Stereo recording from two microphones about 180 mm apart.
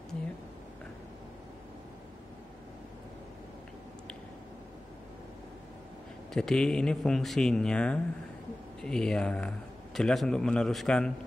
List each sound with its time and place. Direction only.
6.3 s a man's voice: 5° left (ahead or behind)